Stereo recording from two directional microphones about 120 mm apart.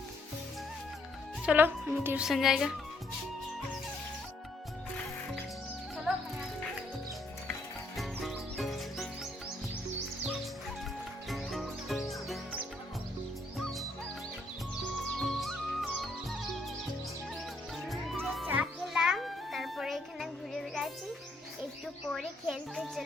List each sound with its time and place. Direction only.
1.5 s a woman's voice: 15° right (ahead or behind)
2.2 s speech: 5° right (ahead or behind)
6.1 s music: 5° right (ahead or behind)
7.9 s music: centre (ahead or behind)
11.3 s music: centre (ahead or behind)
13.6 s music: centre (ahead or behind)
15.2 s music: centre (ahead or behind)
17.8 s music: centre (ahead or behind)
22.1 s music: 5° right (ahead or behind)